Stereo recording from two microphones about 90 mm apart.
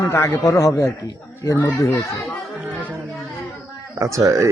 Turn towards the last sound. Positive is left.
turn(degrees=-35)  # may be behind; listen again after turning